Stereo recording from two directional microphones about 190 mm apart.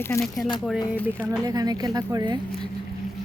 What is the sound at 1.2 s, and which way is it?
Speech, 20° right (ahead or behind).